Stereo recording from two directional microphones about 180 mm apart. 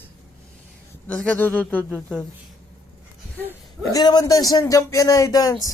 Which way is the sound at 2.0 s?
Centre (ahead or behind).